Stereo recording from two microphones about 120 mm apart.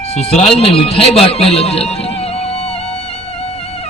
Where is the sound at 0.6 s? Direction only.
50° left (ahead or behind).